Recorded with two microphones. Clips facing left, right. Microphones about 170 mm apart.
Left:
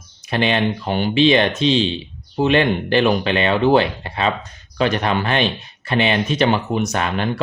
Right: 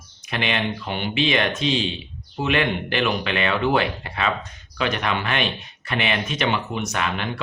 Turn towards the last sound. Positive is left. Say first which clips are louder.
# left 5 dB
turn(degrees=40)  # may be behind; listen again after turning